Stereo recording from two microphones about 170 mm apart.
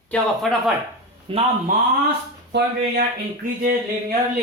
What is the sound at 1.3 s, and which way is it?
Speech, 30° right (ahead or behind).